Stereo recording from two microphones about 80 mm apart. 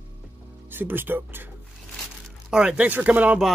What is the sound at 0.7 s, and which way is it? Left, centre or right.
Speech, right.